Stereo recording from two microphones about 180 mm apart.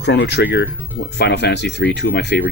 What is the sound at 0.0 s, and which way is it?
Speech, 70° left (ahead or behind).